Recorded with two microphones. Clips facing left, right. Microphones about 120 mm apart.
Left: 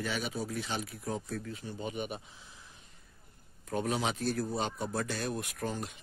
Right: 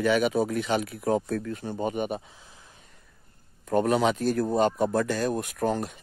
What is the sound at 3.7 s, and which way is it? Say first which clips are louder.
Speech: right 10 dB; 55° right (ahead or behind).